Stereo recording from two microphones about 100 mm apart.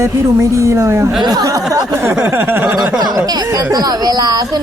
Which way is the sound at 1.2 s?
40° right (ahead or behind).